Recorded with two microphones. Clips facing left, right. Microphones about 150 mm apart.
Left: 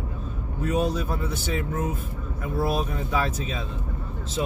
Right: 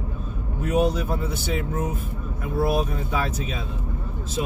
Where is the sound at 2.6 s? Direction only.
15° right (ahead or behind).